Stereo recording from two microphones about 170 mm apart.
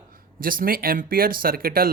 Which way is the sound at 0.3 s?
55° right (ahead or behind).